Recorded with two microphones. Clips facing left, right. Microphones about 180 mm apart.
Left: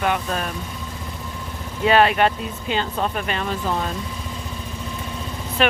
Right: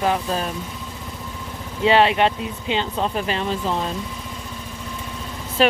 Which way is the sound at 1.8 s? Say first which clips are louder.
Even; 25° right (ahead or behind).